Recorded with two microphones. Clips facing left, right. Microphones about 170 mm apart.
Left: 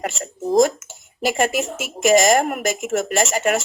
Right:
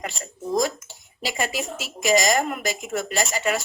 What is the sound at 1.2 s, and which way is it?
Speech, 50° left (ahead or behind).